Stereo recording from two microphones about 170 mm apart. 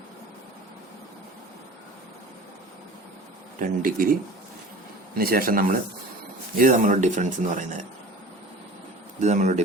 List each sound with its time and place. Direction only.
3.6 s speech: 55° right (ahead or behind)
5.1 s speech: 60° right (ahead or behind)
9.2 s speech: 45° right (ahead or behind)